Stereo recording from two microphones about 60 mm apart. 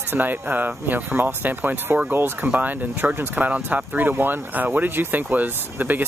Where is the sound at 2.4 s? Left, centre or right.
Right.